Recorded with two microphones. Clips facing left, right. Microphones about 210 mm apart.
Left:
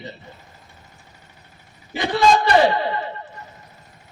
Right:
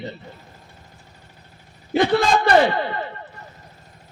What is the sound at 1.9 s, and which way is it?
Speech, 55° right (ahead or behind).